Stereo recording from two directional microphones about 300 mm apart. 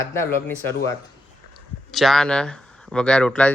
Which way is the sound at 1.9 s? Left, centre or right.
Centre.